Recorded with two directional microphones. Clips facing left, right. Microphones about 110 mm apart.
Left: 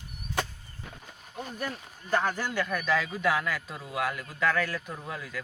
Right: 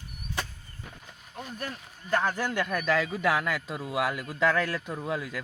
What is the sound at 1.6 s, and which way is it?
Speech, 10° left (ahead or behind).